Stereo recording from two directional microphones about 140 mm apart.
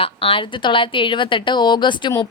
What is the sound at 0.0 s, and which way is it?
Speech, 40° left (ahead or behind).